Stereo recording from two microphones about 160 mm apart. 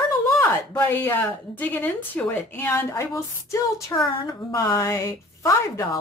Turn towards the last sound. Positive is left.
turn(degrees=20)  # may be behind; listen again after turning